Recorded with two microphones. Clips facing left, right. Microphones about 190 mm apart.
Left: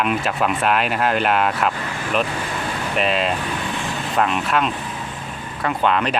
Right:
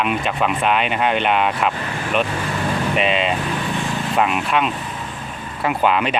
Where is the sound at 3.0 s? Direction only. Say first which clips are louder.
Left 2 dB; centre (ahead or behind).